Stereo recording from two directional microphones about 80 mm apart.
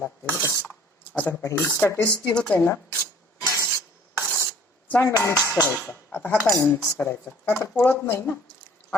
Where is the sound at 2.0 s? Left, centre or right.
Centre.